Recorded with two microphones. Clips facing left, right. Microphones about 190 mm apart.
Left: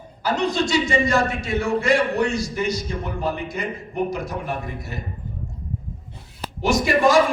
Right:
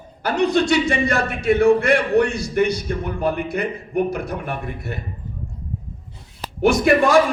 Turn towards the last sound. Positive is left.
turn(degrees=-60)  # may be behind; listen again after turning